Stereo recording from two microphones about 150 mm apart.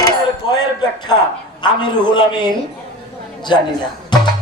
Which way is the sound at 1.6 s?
30° left (ahead or behind).